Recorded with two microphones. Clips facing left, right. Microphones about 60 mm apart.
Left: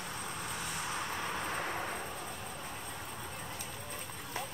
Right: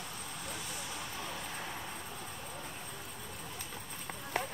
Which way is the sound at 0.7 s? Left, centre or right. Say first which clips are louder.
Left 5 dB; left.